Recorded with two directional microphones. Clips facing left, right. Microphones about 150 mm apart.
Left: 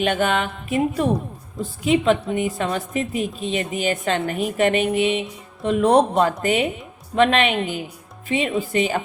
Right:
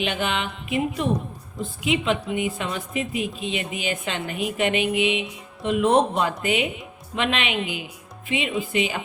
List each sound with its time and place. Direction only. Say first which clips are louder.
0.0 s a woman's voice: left 5 dB; 45° left (ahead or behind)